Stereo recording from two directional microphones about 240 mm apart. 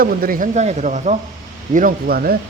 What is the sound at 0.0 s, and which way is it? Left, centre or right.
Speech, right.